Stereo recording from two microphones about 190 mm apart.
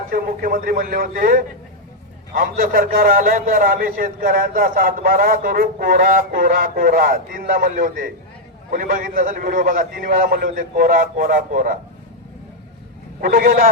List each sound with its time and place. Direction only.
0.1 s a man's voice: 50° right (ahead or behind)
13.2 s a man's voice: 50° right (ahead or behind)